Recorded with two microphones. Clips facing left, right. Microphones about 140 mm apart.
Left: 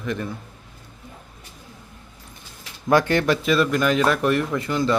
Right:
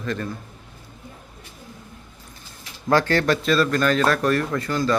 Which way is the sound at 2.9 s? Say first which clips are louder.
Left 1 dB; 15° left (ahead or behind).